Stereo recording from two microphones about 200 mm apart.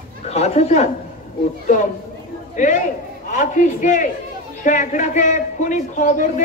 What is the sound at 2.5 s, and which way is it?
A woman's voice, 40° left (ahead or behind).